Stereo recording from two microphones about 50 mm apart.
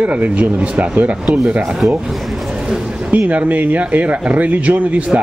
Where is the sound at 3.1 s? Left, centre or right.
Right.